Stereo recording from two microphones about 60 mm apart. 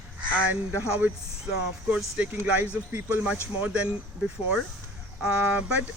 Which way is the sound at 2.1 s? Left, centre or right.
Right.